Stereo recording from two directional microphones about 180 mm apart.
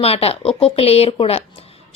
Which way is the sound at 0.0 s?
35° left (ahead or behind).